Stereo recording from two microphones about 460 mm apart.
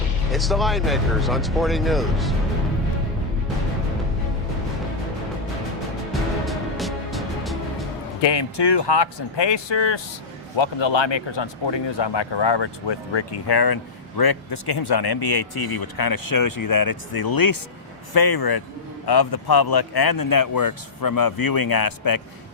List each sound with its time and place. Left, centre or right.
0.3 s speech: centre
6.4 s music: centre
8.2 s speech: left